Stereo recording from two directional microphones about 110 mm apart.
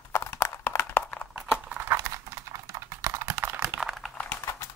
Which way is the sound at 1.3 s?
10° right (ahead or behind).